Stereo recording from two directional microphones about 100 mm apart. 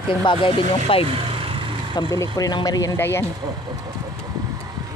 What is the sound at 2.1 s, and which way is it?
Speech, 35° left (ahead or behind).